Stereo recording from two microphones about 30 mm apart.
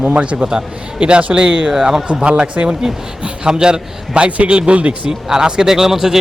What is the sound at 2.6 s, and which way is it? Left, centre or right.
Speech, right.